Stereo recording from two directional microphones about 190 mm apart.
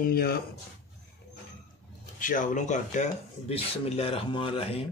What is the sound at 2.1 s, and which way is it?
Speech, 45° left (ahead or behind).